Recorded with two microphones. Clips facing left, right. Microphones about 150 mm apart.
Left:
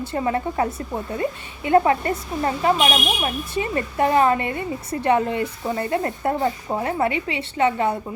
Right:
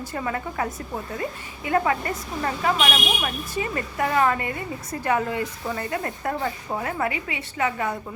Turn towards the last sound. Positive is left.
turn(degrees=25)  # may be behind; listen again after turning